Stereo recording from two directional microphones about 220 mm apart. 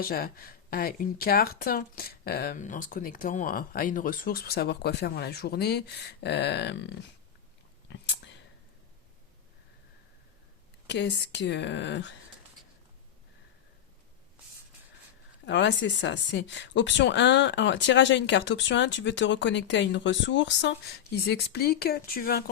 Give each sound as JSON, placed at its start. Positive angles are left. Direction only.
{"t": 0.0, "sound": "speech", "side_deg": 40}
{"t": 7.9, "sound": "whispering", "side_deg": 55}
{"t": 10.8, "sound": "speech", "side_deg": 50}
{"t": 15.4, "sound": "speech", "side_deg": 55}